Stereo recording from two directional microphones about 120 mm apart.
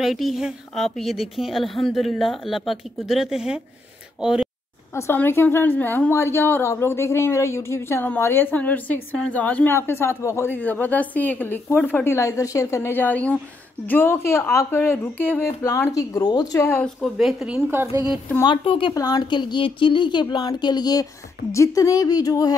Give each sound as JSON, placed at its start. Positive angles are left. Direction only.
{"t": 0.0, "sound": "a woman's voice", "side_deg": 0}
{"t": 4.9, "sound": "a woman's voice", "side_deg": 20}
{"t": 15.6, "sound": "a woman's voice", "side_deg": 25}
{"t": 16.6, "sound": "a woman's voice", "side_deg": 15}
{"t": 17.0, "sound": "a woman's voice", "side_deg": 0}
{"t": 17.6, "sound": "speech", "side_deg": -20}
{"t": 18.4, "sound": "a woman's voice", "side_deg": 45}